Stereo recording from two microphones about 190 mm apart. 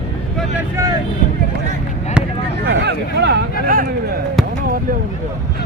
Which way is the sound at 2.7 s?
60° right (ahead or behind).